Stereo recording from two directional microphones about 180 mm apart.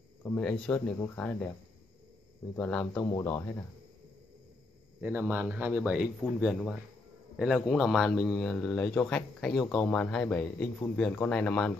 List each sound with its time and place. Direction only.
0.2 s a man's voice: 5° left (ahead or behind)
2.5 s a man's voice: 10° left (ahead or behind)
5.0 s a man's voice: 10° right (ahead or behind)